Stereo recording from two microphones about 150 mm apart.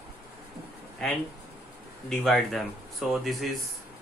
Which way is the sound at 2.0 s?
Centre (ahead or behind).